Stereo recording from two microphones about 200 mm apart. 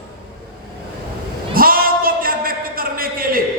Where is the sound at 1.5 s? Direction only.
45° right (ahead or behind).